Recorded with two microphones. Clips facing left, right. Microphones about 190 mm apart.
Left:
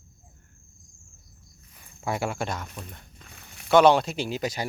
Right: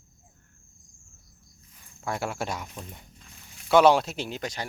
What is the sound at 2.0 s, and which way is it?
Speech, 5° left (ahead or behind).